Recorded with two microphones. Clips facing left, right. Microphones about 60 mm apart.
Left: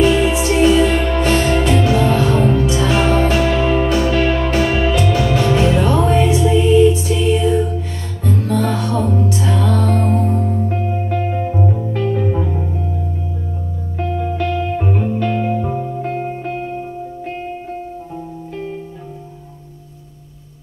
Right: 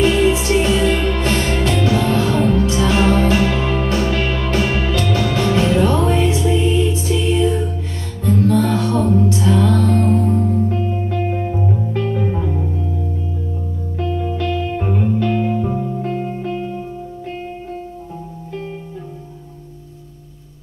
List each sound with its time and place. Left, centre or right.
0.0 s music: centre
8.7 s music: centre
11.5 s music: left
13.9 s music: left
16.0 s music: left